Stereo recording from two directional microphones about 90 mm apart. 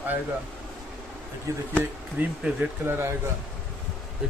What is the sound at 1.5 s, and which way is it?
Speech, 35° right (ahead or behind).